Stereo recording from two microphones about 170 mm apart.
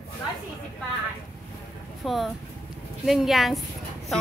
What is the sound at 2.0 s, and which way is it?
Speech, centre (ahead or behind).